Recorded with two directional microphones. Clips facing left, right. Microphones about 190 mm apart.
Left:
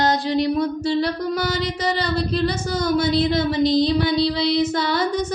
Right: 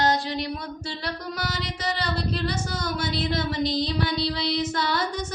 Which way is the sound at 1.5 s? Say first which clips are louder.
Left 8 dB; 20° left (ahead or behind).